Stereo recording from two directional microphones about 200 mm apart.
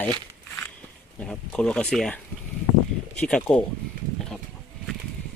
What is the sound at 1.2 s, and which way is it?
Speech, 5° left (ahead or behind).